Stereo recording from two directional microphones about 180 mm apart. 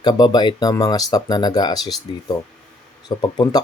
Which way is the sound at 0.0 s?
20° left (ahead or behind).